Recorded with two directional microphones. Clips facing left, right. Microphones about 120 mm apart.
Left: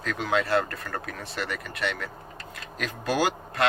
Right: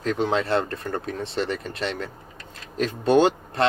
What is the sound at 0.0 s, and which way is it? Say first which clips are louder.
Speech: right 4 dB; 30° right (ahead or behind).